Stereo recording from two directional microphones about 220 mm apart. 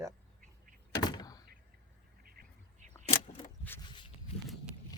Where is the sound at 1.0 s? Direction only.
20° left (ahead or behind).